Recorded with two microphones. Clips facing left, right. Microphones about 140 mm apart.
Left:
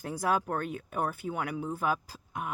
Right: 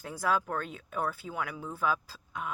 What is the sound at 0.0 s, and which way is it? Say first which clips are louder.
Speech: left 1 dB; 50° left (ahead or behind).